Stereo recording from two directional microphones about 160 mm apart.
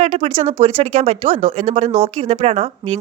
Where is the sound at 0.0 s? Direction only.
40° right (ahead or behind).